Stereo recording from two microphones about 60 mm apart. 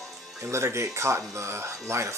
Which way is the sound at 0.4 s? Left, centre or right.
Right.